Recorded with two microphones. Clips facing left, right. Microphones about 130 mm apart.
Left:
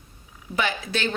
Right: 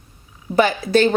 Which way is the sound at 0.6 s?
40° right (ahead or behind).